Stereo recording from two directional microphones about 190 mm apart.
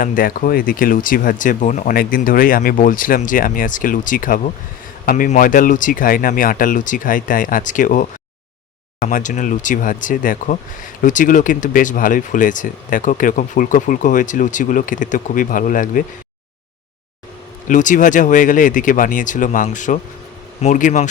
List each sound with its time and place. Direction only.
0.0 s speech: 50° left (ahead or behind)
17.7 s speech: 40° left (ahead or behind)